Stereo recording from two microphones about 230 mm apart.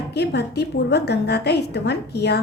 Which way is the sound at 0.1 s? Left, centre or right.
Left.